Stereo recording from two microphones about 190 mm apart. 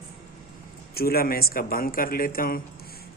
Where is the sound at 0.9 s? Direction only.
55° left (ahead or behind).